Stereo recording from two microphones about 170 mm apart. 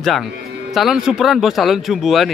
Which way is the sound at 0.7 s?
Centre (ahead or behind).